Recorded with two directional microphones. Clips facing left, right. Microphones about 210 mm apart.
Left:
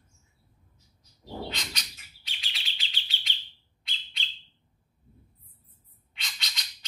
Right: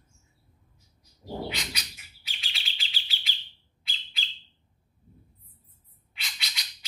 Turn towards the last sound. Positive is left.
turn(degrees=-5)  # may be behind; listen again after turning